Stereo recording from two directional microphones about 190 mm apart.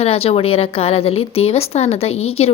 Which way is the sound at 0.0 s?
30° left (ahead or behind).